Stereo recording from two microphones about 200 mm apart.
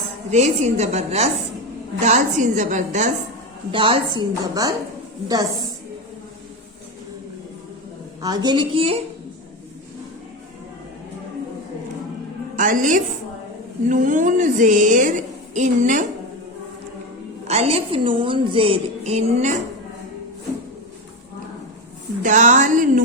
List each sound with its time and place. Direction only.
0.3 s a woman's voice: 35° right (ahead or behind)
3.7 s a woman's voice: 25° right (ahead or behind)
8.2 s a woman's voice: 20° right (ahead or behind)
12.5 s a woman's voice: 40° right (ahead or behind)
17.5 s a woman's voice: 30° right (ahead or behind)
22.2 s a woman's voice: 40° right (ahead or behind)